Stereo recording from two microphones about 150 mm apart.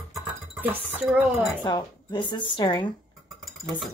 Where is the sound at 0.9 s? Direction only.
10° right (ahead or behind).